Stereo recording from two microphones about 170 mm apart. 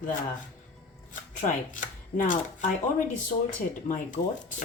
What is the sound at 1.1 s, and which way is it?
Speech, 50° left (ahead or behind).